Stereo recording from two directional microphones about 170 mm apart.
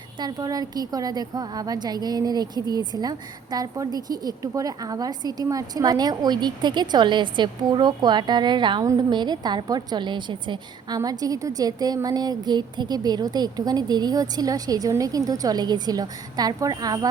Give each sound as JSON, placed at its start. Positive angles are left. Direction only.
{"t": 0.2, "sound": "a woman's voice", "side_deg": -25}